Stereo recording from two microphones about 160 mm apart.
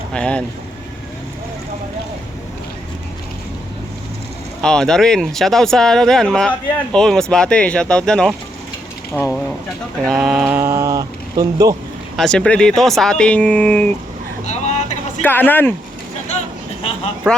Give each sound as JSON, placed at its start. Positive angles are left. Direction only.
{"t": 0.1, "sound": "speech", "side_deg": 5}
{"t": 4.6, "sound": "speech", "side_deg": 5}
{"t": 10.1, "sound": "speech", "side_deg": 0}
{"t": 10.5, "sound": "mantra", "side_deg": -15}
{"t": 12.1, "sound": "speech", "side_deg": 5}
{"t": 14.4, "sound": "vehicle", "side_deg": 45}
{"t": 15.2, "sound": "speech", "side_deg": 10}